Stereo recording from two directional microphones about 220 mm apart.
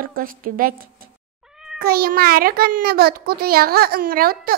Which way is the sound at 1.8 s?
40° right (ahead or behind).